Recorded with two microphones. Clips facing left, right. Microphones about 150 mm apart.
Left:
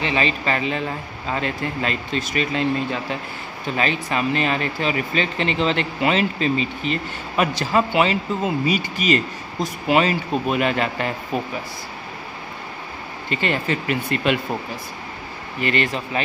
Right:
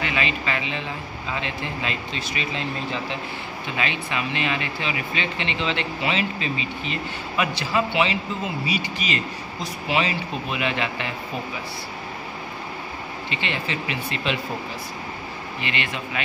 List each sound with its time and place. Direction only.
0.0 s speech: 35° left (ahead or behind); by 3.2 s 50° left (ahead or behind)
3.7 s speech: 40° left (ahead or behind)
13.3 s speech: 45° left (ahead or behind)
15.6 s speech: 40° left (ahead or behind)